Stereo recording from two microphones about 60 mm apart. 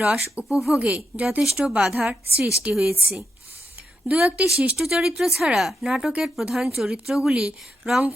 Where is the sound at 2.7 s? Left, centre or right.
Centre.